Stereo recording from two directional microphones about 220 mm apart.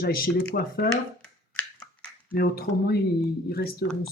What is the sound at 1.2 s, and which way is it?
Finger snapping, 5° left (ahead or behind).